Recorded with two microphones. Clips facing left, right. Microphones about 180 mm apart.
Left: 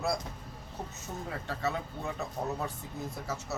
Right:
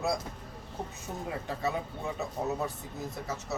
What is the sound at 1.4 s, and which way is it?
Speech, 15° right (ahead or behind).